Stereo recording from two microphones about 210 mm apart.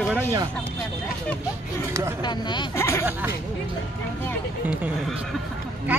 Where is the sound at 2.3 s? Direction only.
20° left (ahead or behind).